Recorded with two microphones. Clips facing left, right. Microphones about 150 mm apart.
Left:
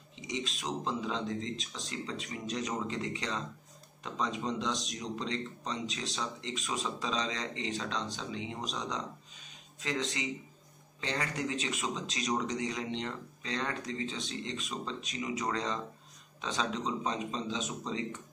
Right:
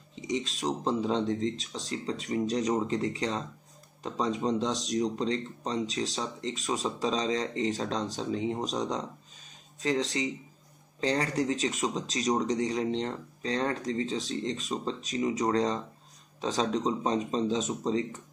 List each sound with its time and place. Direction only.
0.1 s speech: 35° right (ahead or behind)